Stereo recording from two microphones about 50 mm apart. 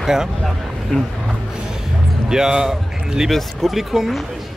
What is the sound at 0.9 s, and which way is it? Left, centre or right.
Speech, left.